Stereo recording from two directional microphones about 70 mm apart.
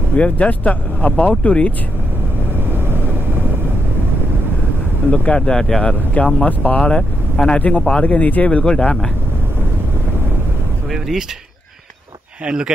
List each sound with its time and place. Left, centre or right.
0.1 s speech: centre
5.1 s speech: centre
10.9 s speech: centre
12.4 s speech: centre